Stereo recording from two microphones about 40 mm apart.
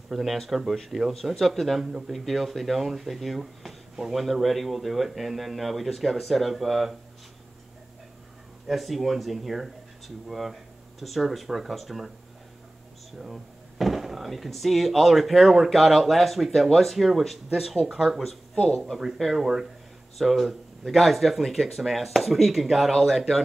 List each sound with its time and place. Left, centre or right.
0.3 s speech: centre
0.9 s speech: centre
1.4 s speech: centre
8.6 s speech: centre
13.2 s speech: centre
18.5 s speech: left
19.1 s speech: centre